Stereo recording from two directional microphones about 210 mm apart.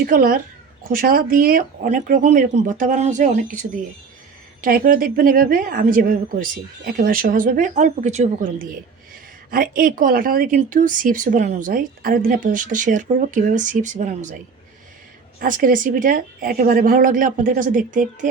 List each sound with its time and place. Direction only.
0.0 s speech: 45° right (ahead or behind)
15.4 s speech: 40° right (ahead or behind)